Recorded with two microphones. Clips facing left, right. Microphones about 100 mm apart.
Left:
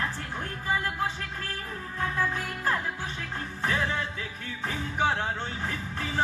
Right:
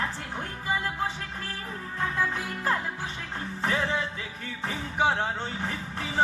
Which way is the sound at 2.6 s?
25° right (ahead or behind).